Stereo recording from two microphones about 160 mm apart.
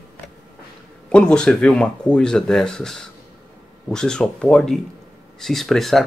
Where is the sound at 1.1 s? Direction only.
5° left (ahead or behind).